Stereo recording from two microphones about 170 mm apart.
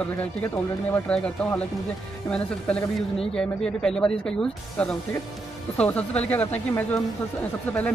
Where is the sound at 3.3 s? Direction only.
5° left (ahead or behind).